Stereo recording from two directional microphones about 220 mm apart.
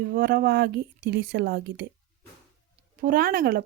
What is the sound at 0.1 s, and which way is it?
Speech, 45° right (ahead or behind).